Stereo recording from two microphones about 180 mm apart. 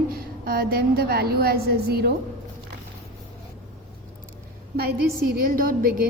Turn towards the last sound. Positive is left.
turn(degrees=-50)  # may be behind; listen again after turning